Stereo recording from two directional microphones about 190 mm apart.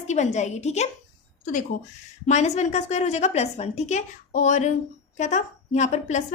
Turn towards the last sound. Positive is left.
turn(degrees=40)  # may be behind; listen again after turning